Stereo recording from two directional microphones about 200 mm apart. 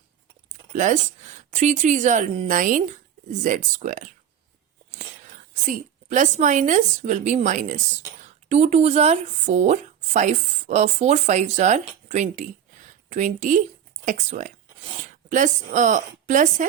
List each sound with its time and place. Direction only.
0.7 s speech: 40° right (ahead or behind)
5.6 s speech: 40° right (ahead or behind)